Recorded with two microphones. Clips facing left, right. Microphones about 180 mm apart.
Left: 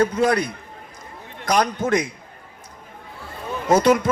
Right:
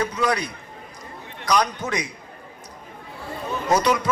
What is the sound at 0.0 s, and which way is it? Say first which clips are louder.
Speech: left 5 dB; 50° left (ahead or behind).